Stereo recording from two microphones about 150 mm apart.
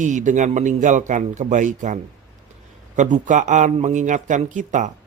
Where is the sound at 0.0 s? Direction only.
55° right (ahead or behind).